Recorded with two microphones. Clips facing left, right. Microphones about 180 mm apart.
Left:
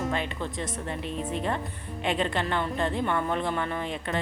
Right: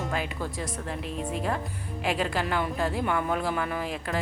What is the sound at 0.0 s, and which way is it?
Speech, 5° right (ahead or behind).